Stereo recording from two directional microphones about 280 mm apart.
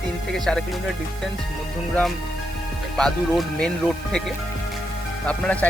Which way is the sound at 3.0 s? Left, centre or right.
Centre.